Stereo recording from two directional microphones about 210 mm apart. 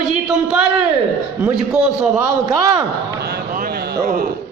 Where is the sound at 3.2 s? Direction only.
50° right (ahead or behind).